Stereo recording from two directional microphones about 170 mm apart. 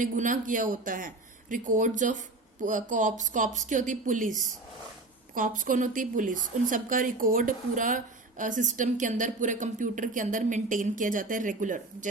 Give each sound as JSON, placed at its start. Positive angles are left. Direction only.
{"t": 0.0, "sound": "a woman's voice", "side_deg": -50}